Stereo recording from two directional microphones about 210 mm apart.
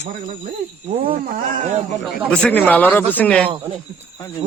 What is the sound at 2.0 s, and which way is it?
Speech, 5° left (ahead or behind).